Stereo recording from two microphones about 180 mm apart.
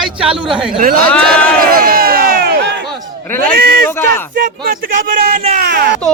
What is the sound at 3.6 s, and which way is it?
Speech, 55° right (ahead or behind).